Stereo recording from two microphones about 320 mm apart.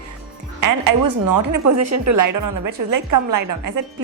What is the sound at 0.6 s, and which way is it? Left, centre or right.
A woman's voice, right.